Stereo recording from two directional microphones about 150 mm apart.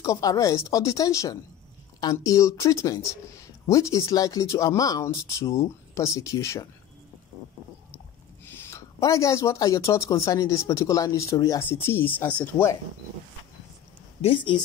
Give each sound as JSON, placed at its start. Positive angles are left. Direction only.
{"t": 0.0, "sound": "speech", "side_deg": 25}
{"t": 8.5, "sound": "speech", "side_deg": 20}
{"t": 14.2, "sound": "speech", "side_deg": 35}